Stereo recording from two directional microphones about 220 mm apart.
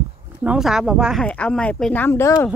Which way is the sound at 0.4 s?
5° right (ahead or behind).